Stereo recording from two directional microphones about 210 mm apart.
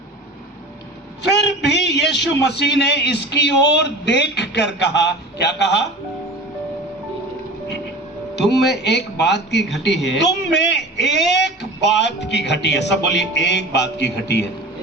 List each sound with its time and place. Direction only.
1.2 s a man's voice: 55° left (ahead or behind)
8.4 s a man's voice: 55° left (ahead or behind)